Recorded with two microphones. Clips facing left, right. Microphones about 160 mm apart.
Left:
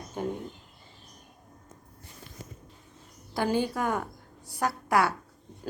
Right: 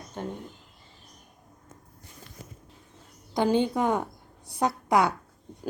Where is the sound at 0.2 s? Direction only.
10° left (ahead or behind).